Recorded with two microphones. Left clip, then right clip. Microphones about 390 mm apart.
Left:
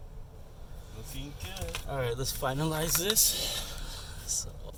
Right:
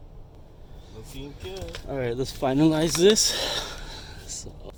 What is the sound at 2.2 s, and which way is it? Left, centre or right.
Speech, centre.